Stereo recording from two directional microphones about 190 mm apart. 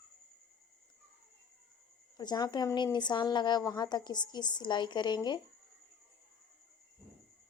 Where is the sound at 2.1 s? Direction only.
20° left (ahead or behind).